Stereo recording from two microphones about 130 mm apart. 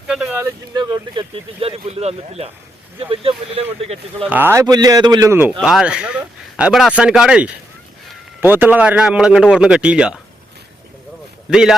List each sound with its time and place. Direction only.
0.7 s speech: 30° right (ahead or behind)
1.5 s speech: 50° right (ahead or behind)
4.3 s speech: 15° right (ahead or behind)
4.6 s a man's voice: 30° right (ahead or behind)
5.5 s speech: 5° right (ahead or behind)
11.5 s a man's voice: 5° right (ahead or behind)